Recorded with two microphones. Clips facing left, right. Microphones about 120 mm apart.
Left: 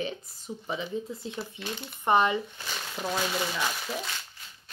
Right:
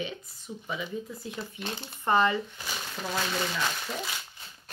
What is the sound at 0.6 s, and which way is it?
Speech, 30° left (ahead or behind).